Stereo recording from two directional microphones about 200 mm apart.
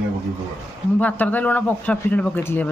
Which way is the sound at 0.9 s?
10° left (ahead or behind).